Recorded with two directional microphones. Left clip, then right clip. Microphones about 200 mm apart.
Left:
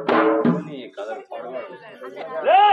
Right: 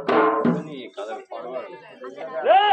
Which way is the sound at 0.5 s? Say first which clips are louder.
Left 1 dB; 20° right (ahead or behind).